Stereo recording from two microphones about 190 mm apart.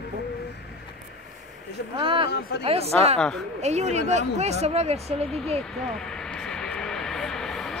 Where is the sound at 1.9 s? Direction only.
25° right (ahead or behind).